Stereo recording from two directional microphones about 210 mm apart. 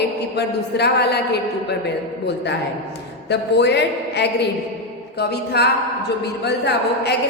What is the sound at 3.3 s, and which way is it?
A woman's voice, 55° left (ahead or behind).